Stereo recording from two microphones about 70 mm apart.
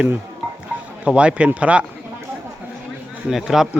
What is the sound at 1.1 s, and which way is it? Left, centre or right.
Speech, centre.